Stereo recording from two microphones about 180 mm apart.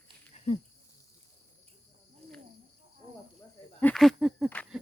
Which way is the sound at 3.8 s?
Centre (ahead or behind).